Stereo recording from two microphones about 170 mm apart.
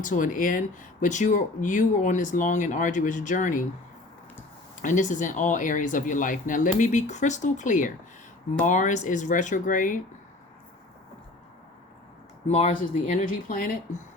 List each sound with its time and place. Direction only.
0.0 s speech: 50° left (ahead or behind)
4.8 s speech: 50° left (ahead or behind)
12.5 s speech: 40° left (ahead or behind)